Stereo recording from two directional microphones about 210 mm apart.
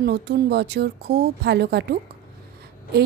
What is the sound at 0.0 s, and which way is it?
A woman's voice, 50° right (ahead or behind).